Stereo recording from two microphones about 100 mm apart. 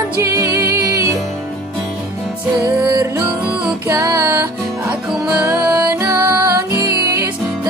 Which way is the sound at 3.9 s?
35° right (ahead or behind).